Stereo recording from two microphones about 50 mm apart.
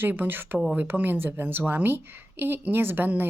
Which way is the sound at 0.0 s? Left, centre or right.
Right.